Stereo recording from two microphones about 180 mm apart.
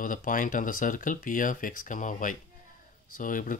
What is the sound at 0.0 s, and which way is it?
Speech, 50° left (ahead or behind).